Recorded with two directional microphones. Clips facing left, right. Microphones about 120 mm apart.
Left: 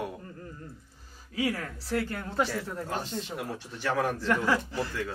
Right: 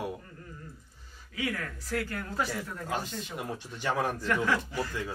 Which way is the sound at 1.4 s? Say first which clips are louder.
Left 4 dB; 35° left (ahead or behind).